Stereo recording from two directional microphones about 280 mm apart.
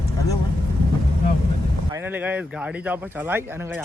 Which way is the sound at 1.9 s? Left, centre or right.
Centre.